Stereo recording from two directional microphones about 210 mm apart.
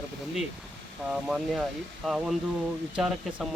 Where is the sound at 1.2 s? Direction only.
Centre (ahead or behind).